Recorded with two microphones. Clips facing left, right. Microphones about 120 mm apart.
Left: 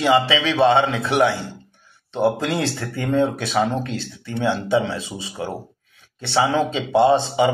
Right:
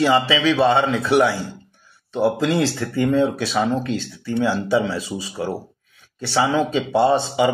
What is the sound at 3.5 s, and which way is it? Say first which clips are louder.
A man's voice: left 1 dB; 30° left (ahead or behind).